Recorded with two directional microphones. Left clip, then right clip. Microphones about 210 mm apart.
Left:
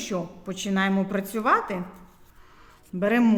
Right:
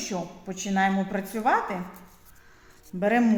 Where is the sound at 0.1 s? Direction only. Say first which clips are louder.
Left 2 dB; 50° left (ahead or behind).